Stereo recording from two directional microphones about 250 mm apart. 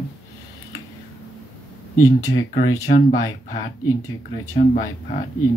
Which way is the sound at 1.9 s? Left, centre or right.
Left.